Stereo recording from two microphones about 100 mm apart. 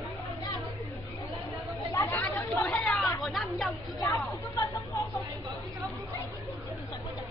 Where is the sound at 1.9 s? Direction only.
25° left (ahead or behind).